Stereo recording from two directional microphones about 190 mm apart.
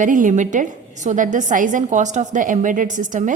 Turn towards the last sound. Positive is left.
turn(degrees=-40)  # may be behind; listen again after turning